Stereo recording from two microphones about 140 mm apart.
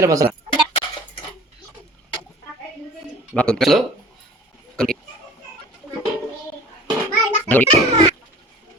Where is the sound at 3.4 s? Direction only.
5° left (ahead or behind).